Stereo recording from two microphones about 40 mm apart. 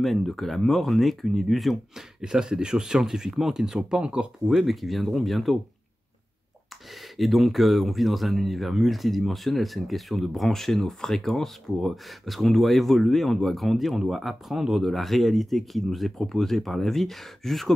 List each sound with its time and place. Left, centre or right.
0.0 s speech: centre
2.2 s speech: centre
4.0 s speech: right
4.5 s speech: centre
7.2 s speech: centre